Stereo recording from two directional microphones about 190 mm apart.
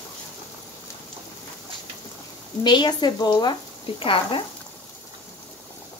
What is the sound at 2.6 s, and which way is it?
Speech, 25° left (ahead or behind).